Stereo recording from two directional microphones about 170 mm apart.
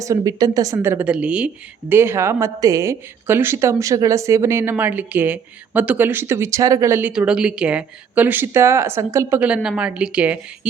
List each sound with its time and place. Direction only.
0.0 s speech: 20° right (ahead or behind)